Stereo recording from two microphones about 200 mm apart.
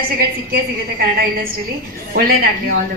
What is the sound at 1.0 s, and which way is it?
A man's voice, 50° right (ahead or behind).